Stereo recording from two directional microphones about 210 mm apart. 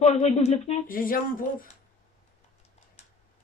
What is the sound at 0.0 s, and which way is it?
A child's voice, 30° left (ahead or behind).